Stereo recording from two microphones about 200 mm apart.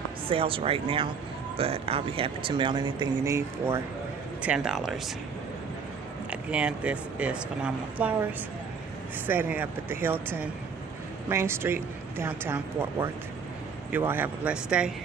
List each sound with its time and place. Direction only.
0.3 s speech: 30° right (ahead or behind); by 5.1 s centre (ahead or behind)
6.3 s speech: 5° right (ahead or behind)
9.2 s speech: 10° right (ahead or behind)